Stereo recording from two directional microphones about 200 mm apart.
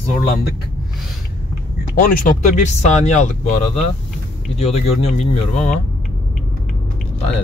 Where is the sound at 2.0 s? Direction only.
40° left (ahead or behind).